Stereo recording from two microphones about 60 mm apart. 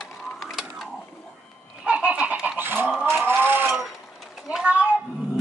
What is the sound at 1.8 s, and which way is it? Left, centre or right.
Fowl, right.